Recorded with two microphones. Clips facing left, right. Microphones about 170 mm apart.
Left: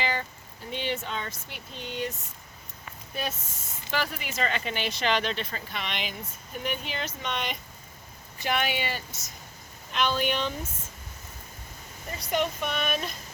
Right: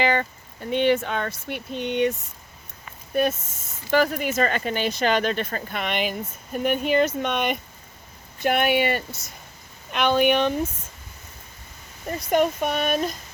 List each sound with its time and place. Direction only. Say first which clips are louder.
0.0 s speech: right 8 dB; 65° right (ahead or behind)
3.9 s speech: right 10 dB; 45° right (ahead or behind)
12.2 s speech: right 7 dB; 50° right (ahead or behind)